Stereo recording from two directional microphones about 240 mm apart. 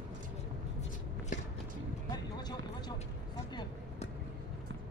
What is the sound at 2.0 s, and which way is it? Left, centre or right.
Vehicle, centre.